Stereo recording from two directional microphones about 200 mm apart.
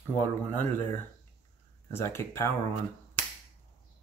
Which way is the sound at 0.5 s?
10° left (ahead or behind).